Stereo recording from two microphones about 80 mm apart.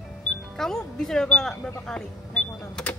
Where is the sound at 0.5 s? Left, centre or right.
Centre.